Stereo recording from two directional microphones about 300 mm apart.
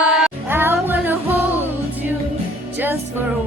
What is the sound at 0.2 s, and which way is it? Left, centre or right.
Music, centre.